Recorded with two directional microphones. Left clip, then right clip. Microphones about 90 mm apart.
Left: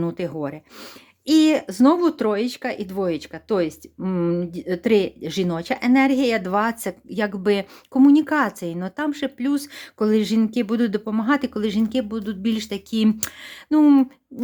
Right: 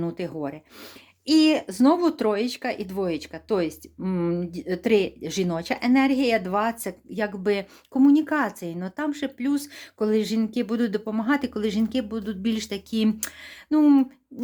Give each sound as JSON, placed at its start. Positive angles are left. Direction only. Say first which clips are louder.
{"t": 0.0, "sound": "speech", "louder": "left 4 dB", "side_deg": 30}